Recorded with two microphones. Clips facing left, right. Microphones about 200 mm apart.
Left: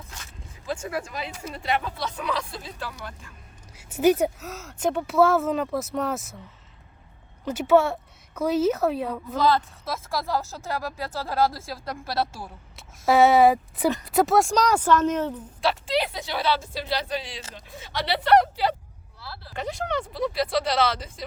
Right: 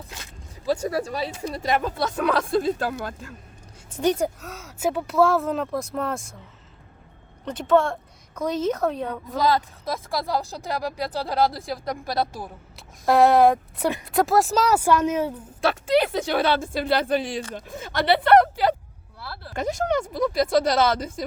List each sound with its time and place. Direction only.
0.0 s speech: 35° right (ahead or behind)
3.8 s a woman's voice: 10° left (ahead or behind)
7.4 s a woman's voice: 10° left (ahead or behind)
9.4 s speech: 15° right (ahead or behind)
12.7 s speech: centre (ahead or behind)
15.6 s speech: 50° right (ahead or behind)